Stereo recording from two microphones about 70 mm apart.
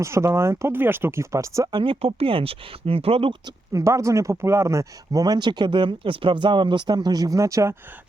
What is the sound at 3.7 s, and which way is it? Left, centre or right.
Speech, right.